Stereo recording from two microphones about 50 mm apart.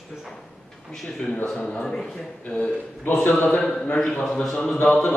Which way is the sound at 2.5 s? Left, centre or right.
Left.